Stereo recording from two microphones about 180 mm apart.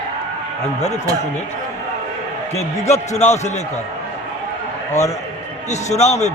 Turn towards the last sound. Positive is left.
turn(degrees=40)  # may be behind; listen again after turning